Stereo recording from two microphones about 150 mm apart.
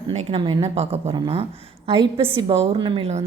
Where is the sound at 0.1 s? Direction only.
35° right (ahead or behind).